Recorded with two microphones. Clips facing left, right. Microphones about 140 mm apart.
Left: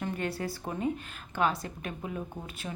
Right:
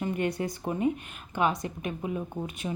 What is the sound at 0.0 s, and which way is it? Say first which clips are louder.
A woman's voice: right 4 dB; 15° right (ahead or behind).